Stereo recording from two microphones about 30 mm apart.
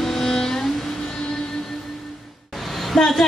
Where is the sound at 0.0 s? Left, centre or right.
Centre.